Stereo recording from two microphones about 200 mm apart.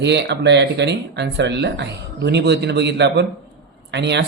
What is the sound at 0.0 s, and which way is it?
Speech, 60° right (ahead or behind).